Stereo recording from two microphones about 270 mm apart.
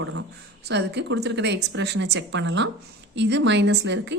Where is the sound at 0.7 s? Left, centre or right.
Right.